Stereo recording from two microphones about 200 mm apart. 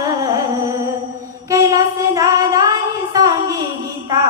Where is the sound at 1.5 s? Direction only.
15° right (ahead or behind).